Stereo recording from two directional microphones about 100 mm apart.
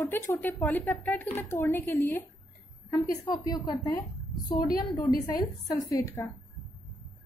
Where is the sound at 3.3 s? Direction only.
40° left (ahead or behind).